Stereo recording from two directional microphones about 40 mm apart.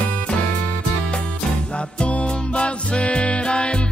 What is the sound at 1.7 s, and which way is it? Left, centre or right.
Music, left.